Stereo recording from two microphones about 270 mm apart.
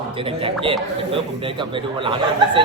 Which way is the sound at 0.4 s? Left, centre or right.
Centre.